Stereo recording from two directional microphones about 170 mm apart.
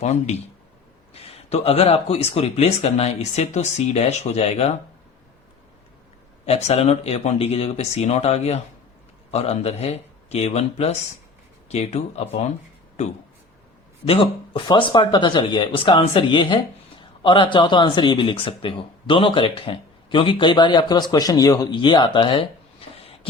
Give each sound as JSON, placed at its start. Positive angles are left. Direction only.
{"t": 0.0, "sound": "speech", "side_deg": 40}
{"t": 6.4, "sound": "speech", "side_deg": 35}
{"t": 14.0, "sound": "speech", "side_deg": 30}